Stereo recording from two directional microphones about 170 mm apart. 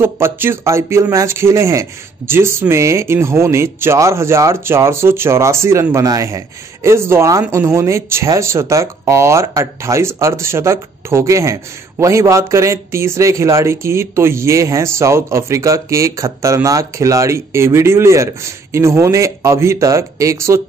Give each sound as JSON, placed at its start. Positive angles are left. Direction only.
{"t": 0.0, "sound": "speech", "side_deg": -15}